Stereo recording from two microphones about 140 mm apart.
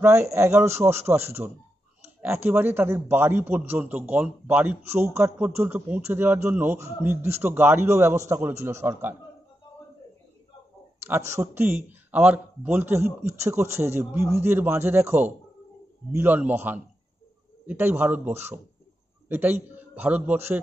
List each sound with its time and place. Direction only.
0.0 s a man's voice: 20° right (ahead or behind)
11.0 s a man's voice: 20° right (ahead or behind)